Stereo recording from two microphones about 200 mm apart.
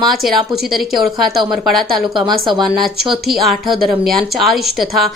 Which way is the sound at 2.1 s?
25° right (ahead or behind).